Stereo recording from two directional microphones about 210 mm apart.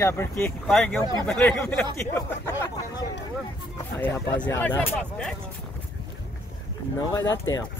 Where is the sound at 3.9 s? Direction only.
10° left (ahead or behind).